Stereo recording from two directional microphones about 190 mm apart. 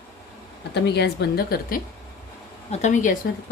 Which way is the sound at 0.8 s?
60° left (ahead or behind).